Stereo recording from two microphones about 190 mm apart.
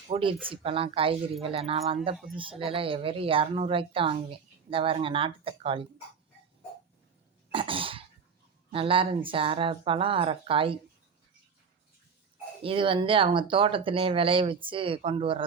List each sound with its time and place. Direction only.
0.1 s a woman's voice: 30° right (ahead or behind)
7.5 s cough: 30° right (ahead or behind)
8.7 s a woman's voice: 30° right (ahead or behind)
12.6 s a woman's voice: 25° right (ahead or behind)